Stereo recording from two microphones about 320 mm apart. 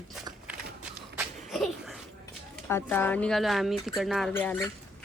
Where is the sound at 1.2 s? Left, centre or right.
Centre.